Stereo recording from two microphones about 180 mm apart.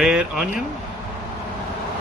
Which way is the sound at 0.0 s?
5° right (ahead or behind).